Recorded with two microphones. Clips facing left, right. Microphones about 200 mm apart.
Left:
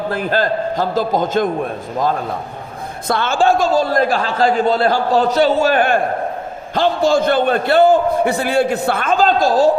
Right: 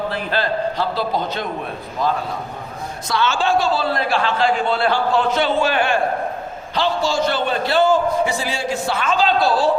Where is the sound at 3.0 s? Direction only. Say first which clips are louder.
Left 5 dB; 55° left (ahead or behind).